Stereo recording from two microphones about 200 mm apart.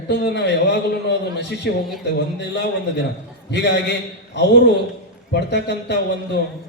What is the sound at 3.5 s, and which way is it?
Speech, 60° left (ahead or behind).